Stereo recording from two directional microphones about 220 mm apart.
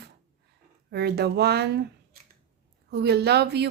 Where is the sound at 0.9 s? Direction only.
50° right (ahead or behind).